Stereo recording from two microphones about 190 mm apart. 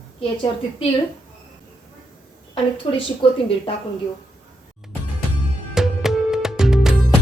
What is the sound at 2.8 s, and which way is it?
Speech, 25° left (ahead or behind).